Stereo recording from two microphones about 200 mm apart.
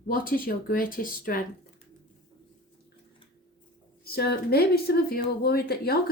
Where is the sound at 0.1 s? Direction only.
45° left (ahead or behind).